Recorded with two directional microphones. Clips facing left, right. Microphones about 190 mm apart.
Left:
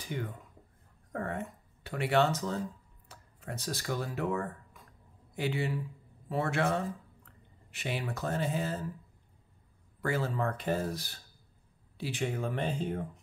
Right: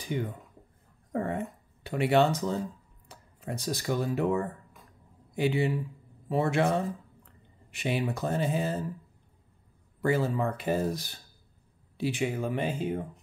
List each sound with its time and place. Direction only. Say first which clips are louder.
0.1 s a man's voice: right 5 dB; 20° right (ahead or behind)
10.0 s speech: right 5 dB; 15° right (ahead or behind)